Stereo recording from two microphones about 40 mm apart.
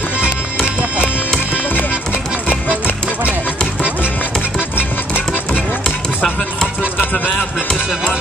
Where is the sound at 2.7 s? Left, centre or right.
Right.